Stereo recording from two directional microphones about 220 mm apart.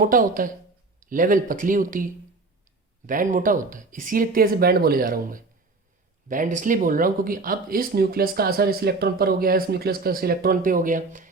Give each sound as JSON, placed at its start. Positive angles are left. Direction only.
{"t": 0.0, "sound": "speech", "side_deg": -40}
{"t": 3.1, "sound": "speech", "side_deg": -35}